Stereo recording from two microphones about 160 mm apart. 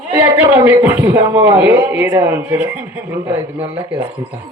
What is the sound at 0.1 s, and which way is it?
A man's voice, 15° right (ahead or behind).